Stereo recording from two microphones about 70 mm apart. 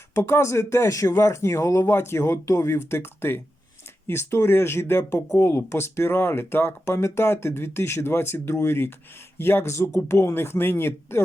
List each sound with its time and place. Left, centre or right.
0.2 s speech: left